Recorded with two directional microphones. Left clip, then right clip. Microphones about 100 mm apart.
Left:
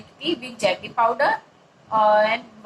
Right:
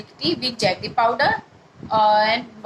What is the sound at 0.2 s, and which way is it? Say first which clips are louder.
A woman's voice: right 2 dB; 30° right (ahead or behind).